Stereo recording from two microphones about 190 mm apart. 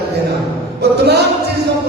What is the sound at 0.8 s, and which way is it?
Music, 60° right (ahead or behind).